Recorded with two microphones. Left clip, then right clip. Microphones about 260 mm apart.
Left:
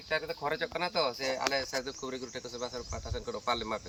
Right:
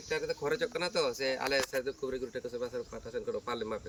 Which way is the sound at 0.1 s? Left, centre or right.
Centre.